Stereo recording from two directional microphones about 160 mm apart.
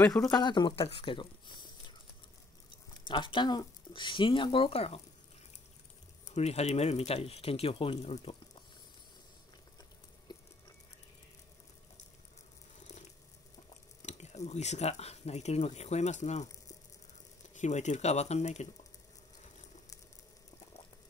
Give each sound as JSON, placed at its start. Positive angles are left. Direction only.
{"t": 0.3, "sound": "speech", "side_deg": 25}
{"t": 3.1, "sound": "speech", "side_deg": 30}
{"t": 6.2, "sound": "speech", "side_deg": 40}
{"t": 10.3, "sound": "a sound", "side_deg": 25}
{"t": 12.8, "sound": "a sound", "side_deg": 45}
{"t": 14.0, "sound": "speech", "side_deg": 45}
{"t": 17.6, "sound": "speech", "side_deg": 45}